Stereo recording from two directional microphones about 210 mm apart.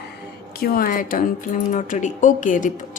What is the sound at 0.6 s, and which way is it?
Speech, 45° left (ahead or behind).